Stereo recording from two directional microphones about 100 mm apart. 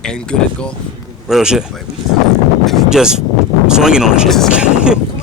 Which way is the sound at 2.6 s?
Centre (ahead or behind).